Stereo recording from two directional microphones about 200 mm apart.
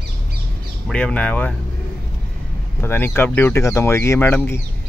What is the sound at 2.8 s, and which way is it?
Speech, 10° left (ahead or behind).